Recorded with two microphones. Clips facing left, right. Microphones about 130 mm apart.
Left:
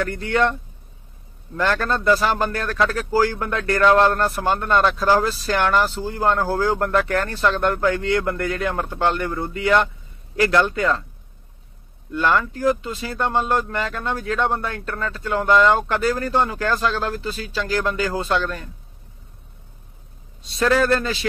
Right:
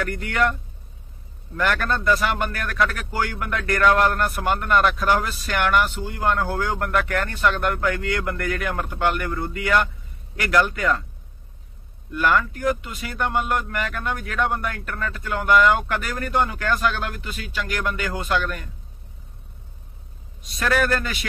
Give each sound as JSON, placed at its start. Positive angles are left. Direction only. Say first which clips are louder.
{"t": 0.0, "sound": "speech", "louder": "left 3 dB", "side_deg": 30}
{"t": 1.6, "sound": "speech", "louder": "left 2 dB", "side_deg": 25}
{"t": 12.1, "sound": "speech", "louder": "left 1 dB", "side_deg": 25}
{"t": 20.4, "sound": "speech", "louder": "left 4 dB", "side_deg": 25}